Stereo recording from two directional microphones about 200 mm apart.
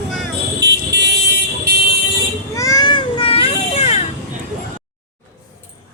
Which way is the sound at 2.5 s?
15° left (ahead or behind).